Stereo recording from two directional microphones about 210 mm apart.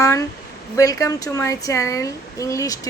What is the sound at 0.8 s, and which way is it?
A woman's voice, 15° left (ahead or behind).